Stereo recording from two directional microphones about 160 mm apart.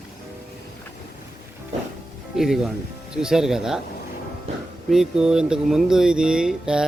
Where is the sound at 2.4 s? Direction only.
Centre (ahead or behind).